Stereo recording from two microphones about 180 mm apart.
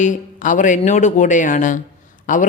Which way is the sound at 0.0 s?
45° left (ahead or behind).